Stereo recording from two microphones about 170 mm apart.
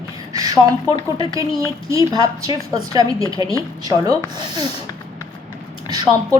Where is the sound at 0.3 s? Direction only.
20° right (ahead or behind).